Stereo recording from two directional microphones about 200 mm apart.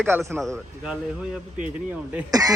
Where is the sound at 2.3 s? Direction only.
20° right (ahead or behind).